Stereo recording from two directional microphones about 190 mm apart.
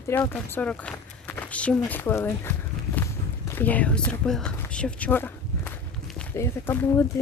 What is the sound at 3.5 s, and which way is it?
Speech, 10° left (ahead or behind).